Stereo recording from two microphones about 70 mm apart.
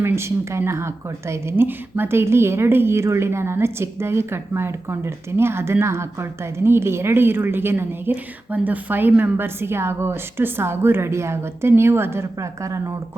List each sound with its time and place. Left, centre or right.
0.0 s a woman's voice: right
8.1 s a woman's voice: right